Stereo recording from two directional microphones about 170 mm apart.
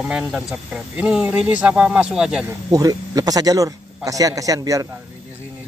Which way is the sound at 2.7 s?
20° right (ahead or behind).